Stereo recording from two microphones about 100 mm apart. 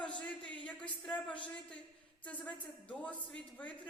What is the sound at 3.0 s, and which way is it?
Music, 15° left (ahead or behind).